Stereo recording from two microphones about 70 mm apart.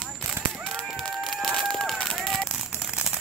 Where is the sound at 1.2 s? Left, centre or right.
Centre.